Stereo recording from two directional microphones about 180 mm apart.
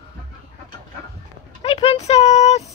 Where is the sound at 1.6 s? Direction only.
35° left (ahead or behind).